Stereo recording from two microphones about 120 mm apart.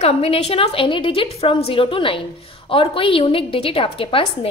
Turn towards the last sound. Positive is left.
turn(degrees=50)  # may be behind; listen again after turning